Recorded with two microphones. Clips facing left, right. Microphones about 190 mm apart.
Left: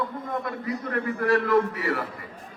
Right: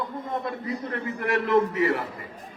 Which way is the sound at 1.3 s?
20° right (ahead or behind).